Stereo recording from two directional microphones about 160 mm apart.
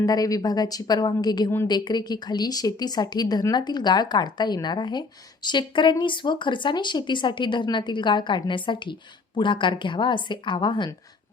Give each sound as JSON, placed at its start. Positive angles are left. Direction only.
{"t": 0.0, "sound": "speech", "side_deg": 20}